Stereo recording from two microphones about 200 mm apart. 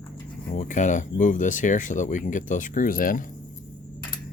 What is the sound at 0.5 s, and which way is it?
Speech, 40° left (ahead or behind).